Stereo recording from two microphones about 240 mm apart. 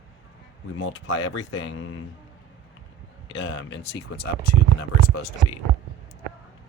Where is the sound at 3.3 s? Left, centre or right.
Left.